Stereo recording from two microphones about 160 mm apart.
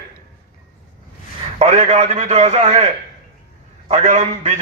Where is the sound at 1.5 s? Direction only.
45° right (ahead or behind).